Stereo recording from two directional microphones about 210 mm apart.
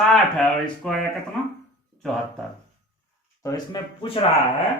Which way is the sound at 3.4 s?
20° left (ahead or behind).